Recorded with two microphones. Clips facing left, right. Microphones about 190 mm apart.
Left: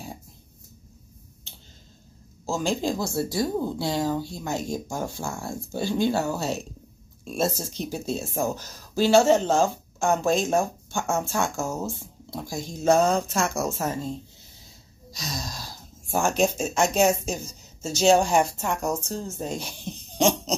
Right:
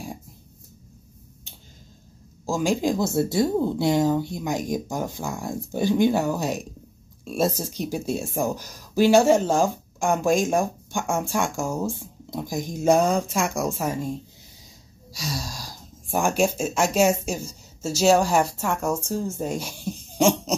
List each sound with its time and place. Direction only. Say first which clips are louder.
2.4 s speech: right 3 dB; 10° right (ahead or behind)